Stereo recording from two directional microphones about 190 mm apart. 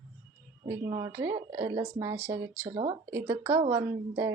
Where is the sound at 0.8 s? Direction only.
20° right (ahead or behind).